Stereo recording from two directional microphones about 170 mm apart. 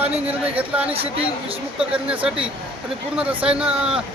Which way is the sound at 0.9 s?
35° right (ahead or behind).